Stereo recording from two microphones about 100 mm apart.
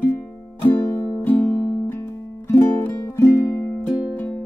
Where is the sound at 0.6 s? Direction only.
15° left (ahead or behind).